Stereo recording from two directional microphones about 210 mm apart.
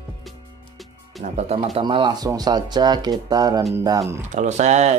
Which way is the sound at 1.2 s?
30° right (ahead or behind).